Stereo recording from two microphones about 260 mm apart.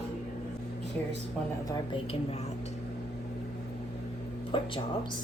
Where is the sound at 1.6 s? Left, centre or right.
Centre.